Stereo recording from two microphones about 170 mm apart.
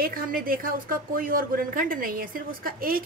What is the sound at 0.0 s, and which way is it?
A woman's voice, 55° right (ahead or behind).